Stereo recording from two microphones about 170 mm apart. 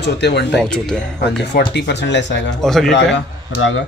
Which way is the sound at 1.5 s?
80° left.